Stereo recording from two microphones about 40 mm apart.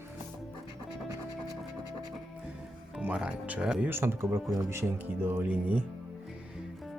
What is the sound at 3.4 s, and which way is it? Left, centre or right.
Speech, right.